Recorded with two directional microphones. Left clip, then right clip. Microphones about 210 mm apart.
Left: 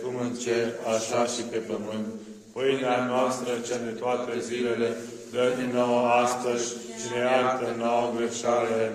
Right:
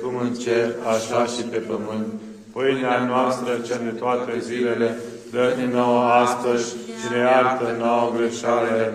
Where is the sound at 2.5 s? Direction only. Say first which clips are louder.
Right 4 dB; 15° right (ahead or behind).